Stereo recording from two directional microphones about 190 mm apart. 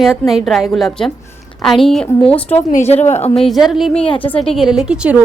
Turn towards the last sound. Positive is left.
turn(degrees=-5)  # may be behind; listen again after turning